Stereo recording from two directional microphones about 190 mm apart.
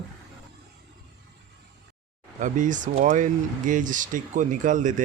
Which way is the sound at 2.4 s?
40° right (ahead or behind).